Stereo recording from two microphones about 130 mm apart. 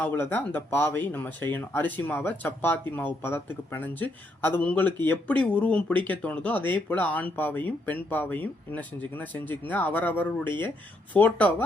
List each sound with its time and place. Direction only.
0.0 s speech: 15° left (ahead or behind)